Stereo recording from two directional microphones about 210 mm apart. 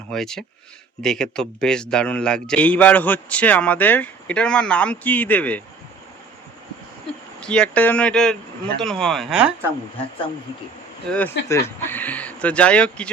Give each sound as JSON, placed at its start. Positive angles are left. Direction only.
{"t": 0.1, "sound": "a man's voice", "side_deg": 0}
{"t": 7.4, "sound": "a man's voice", "side_deg": 5}
{"t": 11.1, "sound": "speech", "side_deg": 5}